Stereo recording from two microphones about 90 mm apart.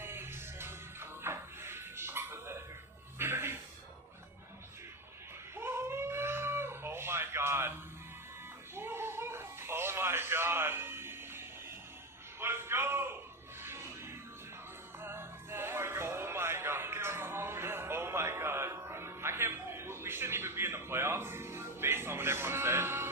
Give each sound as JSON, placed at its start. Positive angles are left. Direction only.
{"t": 0.0, "sound": "music", "side_deg": -25}
{"t": 5.5, "sound": "cat", "side_deg": -25}
{"t": 8.7, "sound": "a sound", "side_deg": -25}
{"t": 13.6, "sound": "music", "side_deg": -25}